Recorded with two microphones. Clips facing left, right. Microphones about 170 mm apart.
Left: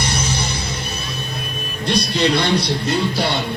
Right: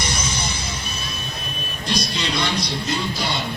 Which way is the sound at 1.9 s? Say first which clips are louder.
Left 7 dB; 65° left (ahead or behind).